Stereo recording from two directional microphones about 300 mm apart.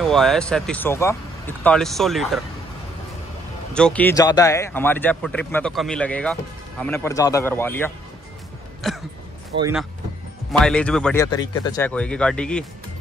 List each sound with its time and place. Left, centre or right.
0.0 s speech: centre
3.7 s speech: centre
9.5 s speech: right
10.6 s speech: centre
11.2 s speech: centre